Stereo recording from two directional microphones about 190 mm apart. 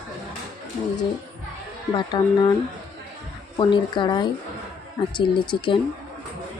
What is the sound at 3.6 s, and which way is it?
Speech, 25° left (ahead or behind).